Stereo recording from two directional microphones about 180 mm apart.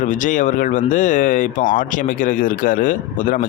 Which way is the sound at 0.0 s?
45° left (ahead or behind).